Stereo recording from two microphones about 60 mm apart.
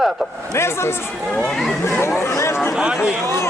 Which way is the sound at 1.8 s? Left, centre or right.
Left.